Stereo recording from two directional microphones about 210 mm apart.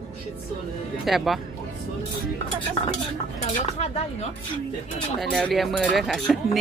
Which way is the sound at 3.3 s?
30° left (ahead or behind).